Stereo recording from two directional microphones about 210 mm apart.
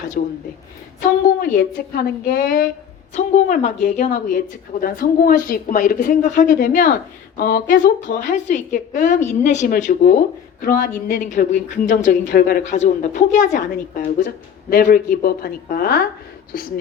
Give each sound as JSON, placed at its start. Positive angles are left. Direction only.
{"t": 0.2, "sound": "a woman's voice", "side_deg": 45}
{"t": 3.2, "sound": "a woman's voice", "side_deg": 35}